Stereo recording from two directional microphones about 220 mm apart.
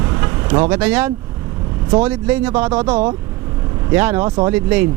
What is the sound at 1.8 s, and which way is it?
Speech, 25° right (ahead or behind).